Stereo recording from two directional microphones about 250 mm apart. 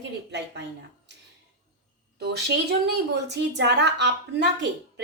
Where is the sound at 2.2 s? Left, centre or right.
Right.